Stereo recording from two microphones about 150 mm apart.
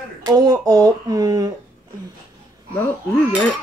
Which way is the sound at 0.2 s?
25° right (ahead or behind).